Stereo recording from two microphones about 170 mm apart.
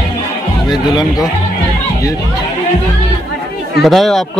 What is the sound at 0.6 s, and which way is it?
Music, 25° left (ahead or behind).